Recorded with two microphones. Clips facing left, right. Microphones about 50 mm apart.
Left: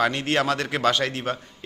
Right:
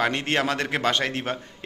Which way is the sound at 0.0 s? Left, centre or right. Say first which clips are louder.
Left 1 dB; right.